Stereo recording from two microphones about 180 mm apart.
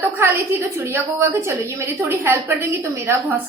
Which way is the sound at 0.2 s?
15° right (ahead or behind).